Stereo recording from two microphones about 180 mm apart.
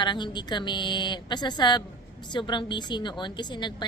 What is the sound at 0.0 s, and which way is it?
A woman's voice, 25° left (ahead or behind).